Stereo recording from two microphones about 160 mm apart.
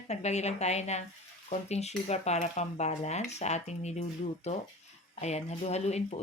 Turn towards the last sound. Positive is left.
turn(degrees=45)  # may be behind; listen again after turning